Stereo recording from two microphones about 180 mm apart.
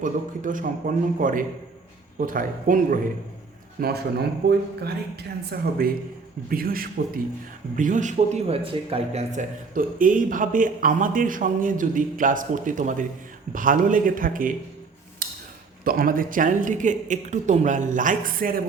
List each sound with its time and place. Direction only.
0.0 s a man's voice: 45° right (ahead or behind)
3.8 s a man's voice: 60° right (ahead or behind)
15.2 s a sound: 50° right (ahead or behind)
15.8 s a man's voice: 55° right (ahead or behind)